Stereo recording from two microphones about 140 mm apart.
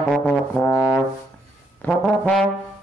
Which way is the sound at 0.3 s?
10° left (ahead or behind).